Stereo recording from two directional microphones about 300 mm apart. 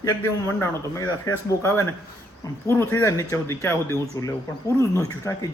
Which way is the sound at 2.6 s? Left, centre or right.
Centre.